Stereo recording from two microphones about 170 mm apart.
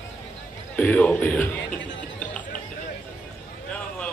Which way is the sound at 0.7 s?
10° left (ahead or behind).